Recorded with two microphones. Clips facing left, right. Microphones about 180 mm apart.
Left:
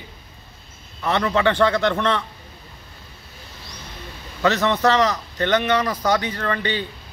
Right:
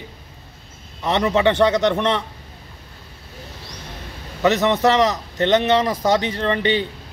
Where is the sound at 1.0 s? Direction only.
20° right (ahead or behind).